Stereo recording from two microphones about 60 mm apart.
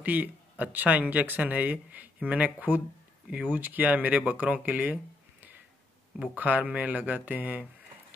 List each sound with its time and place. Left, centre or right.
0.0 s speech: right
6.3 s speech: right